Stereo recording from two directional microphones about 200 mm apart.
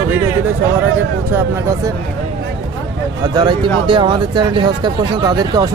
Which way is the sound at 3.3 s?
20° right (ahead or behind).